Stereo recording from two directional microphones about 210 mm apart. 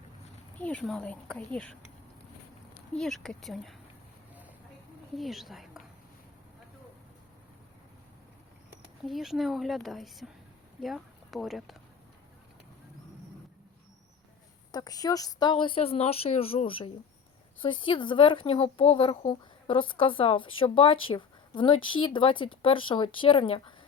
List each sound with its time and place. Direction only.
0.6 s speech: 5° left (ahead or behind)
2.9 s speech: centre (ahead or behind)
5.1 s speech: centre (ahead or behind)
8.7 s speech: centre (ahead or behind)
14.7 s speech: 20° left (ahead or behind)